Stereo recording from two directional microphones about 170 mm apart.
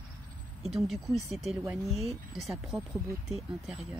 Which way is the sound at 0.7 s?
Centre (ahead or behind).